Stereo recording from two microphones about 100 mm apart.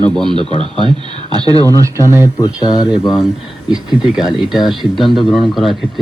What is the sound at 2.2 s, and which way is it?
Speech, 40° left (ahead or behind).